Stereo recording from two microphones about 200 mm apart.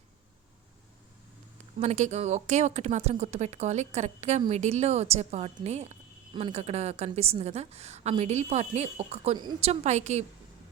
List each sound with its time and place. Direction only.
1.8 s speech: 35° right (ahead or behind)